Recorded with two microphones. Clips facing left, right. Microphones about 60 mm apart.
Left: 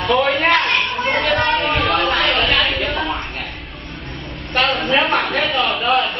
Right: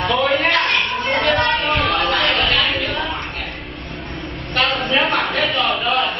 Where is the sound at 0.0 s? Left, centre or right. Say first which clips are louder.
Left 1 dB; centre.